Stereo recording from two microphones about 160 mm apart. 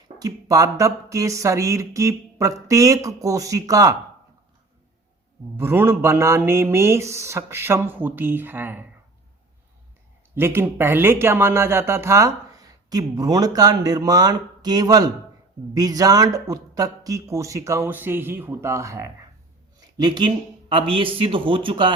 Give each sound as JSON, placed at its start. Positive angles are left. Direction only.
{"t": 0.2, "sound": "speech", "side_deg": -20}
{"t": 5.5, "sound": "speech", "side_deg": -15}
{"t": 10.3, "sound": "speech", "side_deg": -15}